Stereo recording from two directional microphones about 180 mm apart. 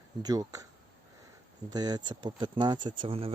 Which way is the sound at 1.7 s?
20° right (ahead or behind).